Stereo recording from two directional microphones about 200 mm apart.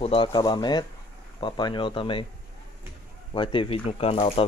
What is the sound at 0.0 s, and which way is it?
Speech, 25° left (ahead or behind).